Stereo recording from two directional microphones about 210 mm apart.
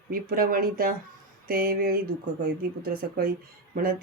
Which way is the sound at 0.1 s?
45° right (ahead or behind).